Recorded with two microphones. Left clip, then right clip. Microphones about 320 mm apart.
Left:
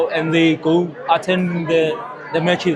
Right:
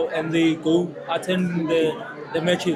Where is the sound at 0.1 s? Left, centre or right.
Centre.